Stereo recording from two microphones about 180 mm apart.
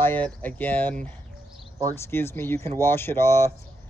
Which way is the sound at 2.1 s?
10° left (ahead or behind).